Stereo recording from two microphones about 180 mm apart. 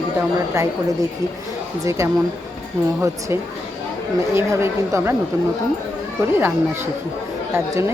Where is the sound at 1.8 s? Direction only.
15° right (ahead or behind).